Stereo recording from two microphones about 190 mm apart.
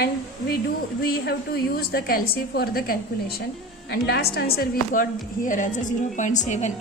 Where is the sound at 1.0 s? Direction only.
55° left (ahead or behind).